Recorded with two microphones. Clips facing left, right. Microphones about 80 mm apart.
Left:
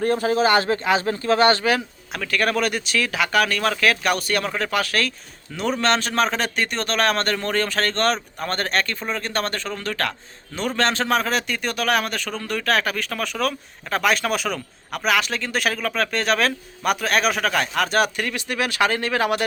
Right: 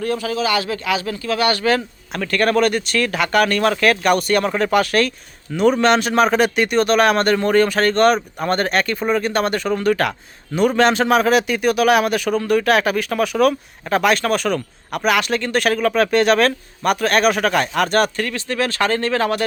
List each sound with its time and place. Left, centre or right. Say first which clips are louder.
0.0 s speech: left 2 dB; left
2.1 s a man's voice: right 5 dB; centre